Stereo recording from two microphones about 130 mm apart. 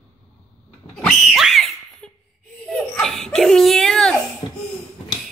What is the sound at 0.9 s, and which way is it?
Pig, centre (ahead or behind).